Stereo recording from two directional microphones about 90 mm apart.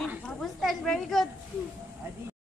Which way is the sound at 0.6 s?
5° left (ahead or behind).